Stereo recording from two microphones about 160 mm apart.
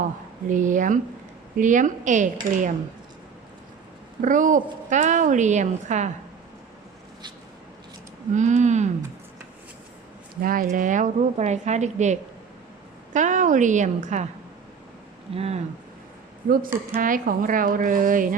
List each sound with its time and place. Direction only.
0.4 s a woman's voice: 50° right (ahead or behind)
4.2 s a woman's voice: 55° right (ahead or behind)
8.3 s a woman's voice: 50° right (ahead or behind)
10.4 s a woman's voice: 60° right (ahead or behind)
15.4 s speech: 40° right (ahead or behind)
16.9 s speech: 55° right (ahead or behind)